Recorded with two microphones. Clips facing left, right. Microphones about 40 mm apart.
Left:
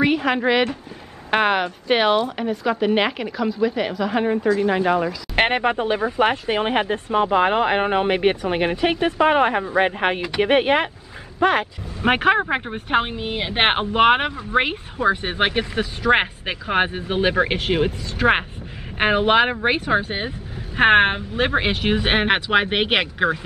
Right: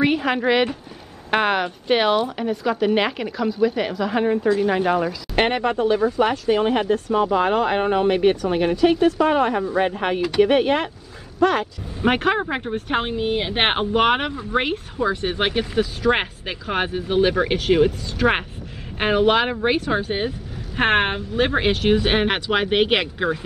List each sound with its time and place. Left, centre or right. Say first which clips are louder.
0.0 s a woman's voice: left 1 dB; centre
5.3 s speech: left 1 dB; left